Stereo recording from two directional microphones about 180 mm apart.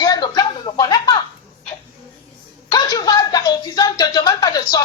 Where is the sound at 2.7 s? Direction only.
20° left (ahead or behind).